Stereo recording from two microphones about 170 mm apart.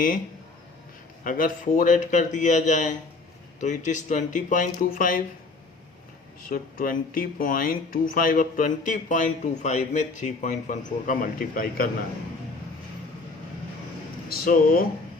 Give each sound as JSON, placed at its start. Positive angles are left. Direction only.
{"t": 1.2, "sound": "speech", "side_deg": 55}
{"t": 6.5, "sound": "speech", "side_deg": 55}
{"t": 14.3, "sound": "speech", "side_deg": 60}